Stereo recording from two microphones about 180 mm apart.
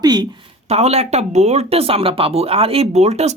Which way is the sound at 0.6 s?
35° right (ahead or behind).